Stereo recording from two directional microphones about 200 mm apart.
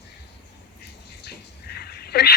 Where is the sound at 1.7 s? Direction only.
55° left (ahead or behind).